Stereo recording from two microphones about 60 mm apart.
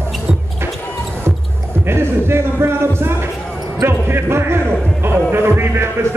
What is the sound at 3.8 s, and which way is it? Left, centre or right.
Speech, right.